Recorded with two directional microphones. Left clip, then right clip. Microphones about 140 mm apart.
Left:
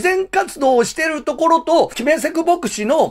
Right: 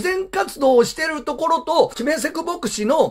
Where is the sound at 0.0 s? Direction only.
20° left (ahead or behind).